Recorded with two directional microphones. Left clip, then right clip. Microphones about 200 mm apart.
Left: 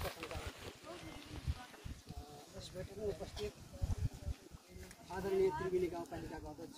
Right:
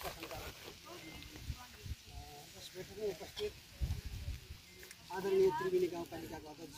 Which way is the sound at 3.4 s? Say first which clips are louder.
Right 3 dB; 55° left (ahead or behind).